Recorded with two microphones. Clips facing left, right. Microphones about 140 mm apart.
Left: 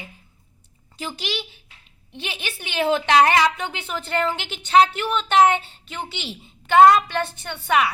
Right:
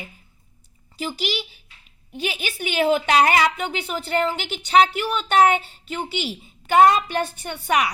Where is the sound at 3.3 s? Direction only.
10° right (ahead or behind).